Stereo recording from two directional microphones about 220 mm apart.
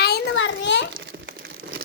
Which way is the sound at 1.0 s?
50° right (ahead or behind).